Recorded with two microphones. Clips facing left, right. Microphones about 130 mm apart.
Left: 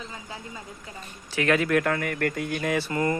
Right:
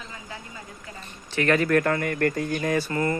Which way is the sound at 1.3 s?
Centre (ahead or behind).